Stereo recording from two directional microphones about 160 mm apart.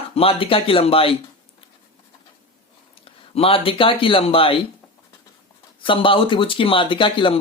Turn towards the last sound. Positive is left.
turn(degrees=30)  # may be behind; listen again after turning